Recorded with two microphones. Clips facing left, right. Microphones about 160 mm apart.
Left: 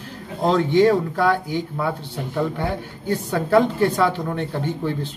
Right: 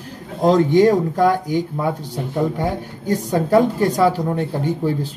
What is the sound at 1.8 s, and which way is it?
Speech, 15° right (ahead or behind).